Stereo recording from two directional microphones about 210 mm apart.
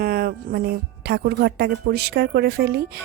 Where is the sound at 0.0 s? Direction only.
45° right (ahead or behind).